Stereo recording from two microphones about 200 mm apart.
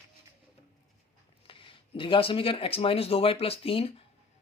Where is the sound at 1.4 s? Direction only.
25° left (ahead or behind).